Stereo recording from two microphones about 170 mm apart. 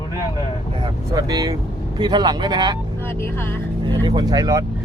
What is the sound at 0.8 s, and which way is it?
Speech, 20° right (ahead or behind).